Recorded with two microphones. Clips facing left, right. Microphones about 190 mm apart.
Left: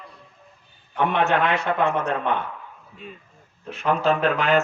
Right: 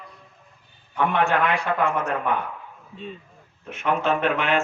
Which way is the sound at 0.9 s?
20° left (ahead or behind).